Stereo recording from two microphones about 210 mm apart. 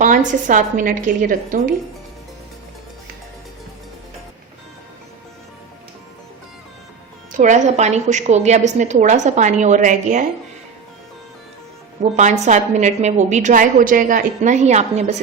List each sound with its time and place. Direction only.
0.0 s a woman's voice: 35° right (ahead or behind)
7.3 s a woman's voice: 35° right (ahead or behind)
12.1 s a woman's voice: 35° right (ahead or behind)